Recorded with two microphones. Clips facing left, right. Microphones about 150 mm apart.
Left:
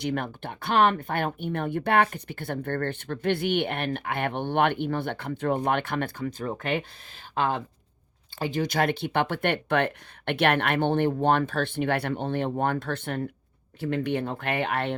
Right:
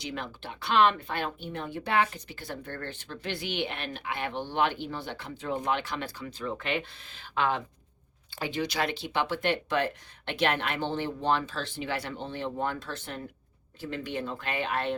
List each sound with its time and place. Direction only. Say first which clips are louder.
0.0 s speech: left 7 dB; 55° left (ahead or behind)